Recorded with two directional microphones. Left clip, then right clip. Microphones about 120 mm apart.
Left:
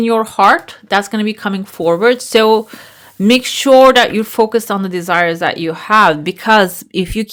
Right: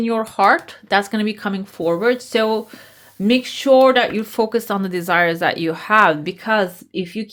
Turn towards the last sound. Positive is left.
turn(degrees=60)  # may be behind; listen again after turning